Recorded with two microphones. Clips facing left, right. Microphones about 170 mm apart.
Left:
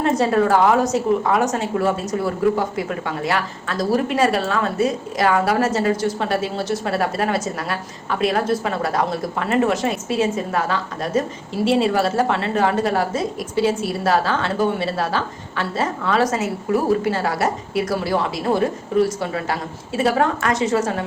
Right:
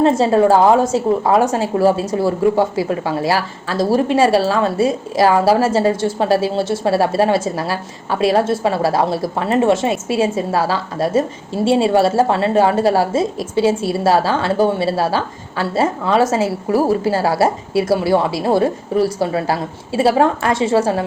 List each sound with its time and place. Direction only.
0.0 s a woman's voice: 25° right (ahead or behind)